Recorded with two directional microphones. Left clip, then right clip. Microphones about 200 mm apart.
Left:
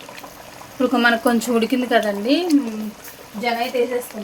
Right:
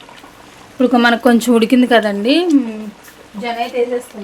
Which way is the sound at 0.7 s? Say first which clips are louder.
Right 5 dB; 35° right (ahead or behind).